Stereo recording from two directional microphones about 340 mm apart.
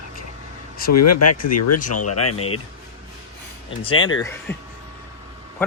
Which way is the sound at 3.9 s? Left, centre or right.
Left.